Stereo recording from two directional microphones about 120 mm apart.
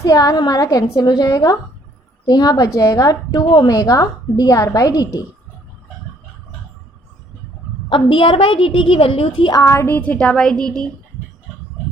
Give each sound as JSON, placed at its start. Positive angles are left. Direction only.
{"t": 0.0, "sound": "a woman's voice", "side_deg": 30}
{"t": 7.9, "sound": "a woman's voice", "side_deg": 45}
{"t": 9.5, "sound": "speech", "side_deg": 25}